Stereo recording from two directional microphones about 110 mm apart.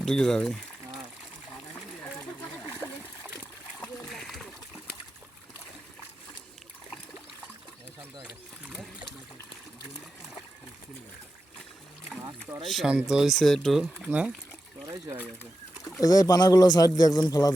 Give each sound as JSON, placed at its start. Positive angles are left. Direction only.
{"t": 0.0, "sound": "pour", "side_deg": 5}
{"t": 4.1, "sound": "splash", "side_deg": 0}
{"t": 8.2, "sound": "a sound", "side_deg": -5}
{"t": 12.6, "sound": "speech", "side_deg": 0}
{"t": 15.9, "sound": "speech", "side_deg": 30}